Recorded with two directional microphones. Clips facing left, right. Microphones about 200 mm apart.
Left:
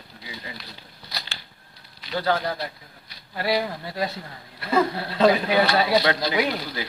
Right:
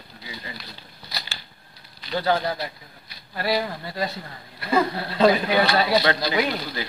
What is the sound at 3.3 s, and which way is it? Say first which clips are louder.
Speech: even; 20° left (ahead or behind).